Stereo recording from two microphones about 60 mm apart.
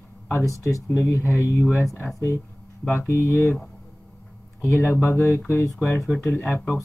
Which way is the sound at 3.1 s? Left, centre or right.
Left.